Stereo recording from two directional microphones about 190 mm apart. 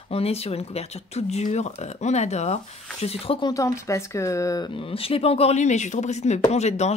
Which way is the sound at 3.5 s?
15° left (ahead or behind).